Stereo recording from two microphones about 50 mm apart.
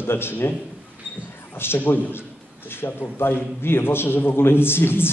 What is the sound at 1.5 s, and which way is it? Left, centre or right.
A man's voice, left.